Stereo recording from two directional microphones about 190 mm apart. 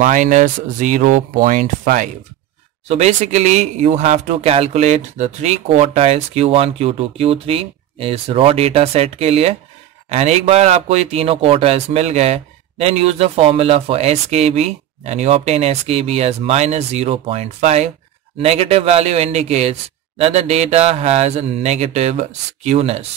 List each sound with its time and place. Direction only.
0.0 s speech: 40° right (ahead or behind)